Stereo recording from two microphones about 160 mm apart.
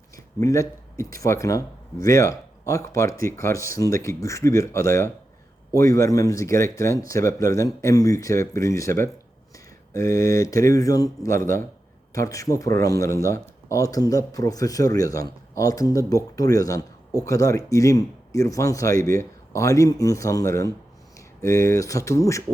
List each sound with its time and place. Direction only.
0.3 s a man's voice: 20° left (ahead or behind)